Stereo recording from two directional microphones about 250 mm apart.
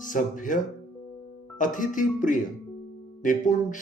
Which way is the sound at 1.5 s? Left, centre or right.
Left.